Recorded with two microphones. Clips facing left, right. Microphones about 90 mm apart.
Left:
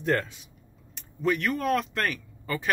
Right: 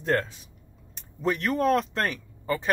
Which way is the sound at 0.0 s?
35° right (ahead or behind).